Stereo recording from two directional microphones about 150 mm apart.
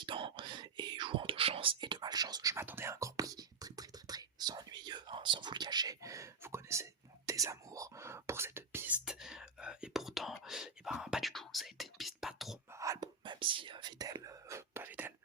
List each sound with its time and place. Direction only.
0.0 s whispering: 35° right (ahead or behind); by 12.5 s centre (ahead or behind)
12.7 s whispering: 20° right (ahead or behind)